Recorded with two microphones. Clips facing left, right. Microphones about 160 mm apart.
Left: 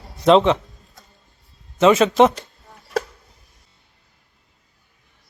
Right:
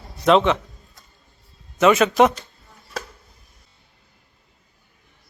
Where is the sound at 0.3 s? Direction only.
30° left (ahead or behind).